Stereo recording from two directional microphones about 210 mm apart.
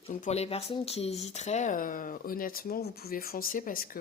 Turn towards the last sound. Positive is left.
turn(degrees=40)  # may be behind; listen again after turning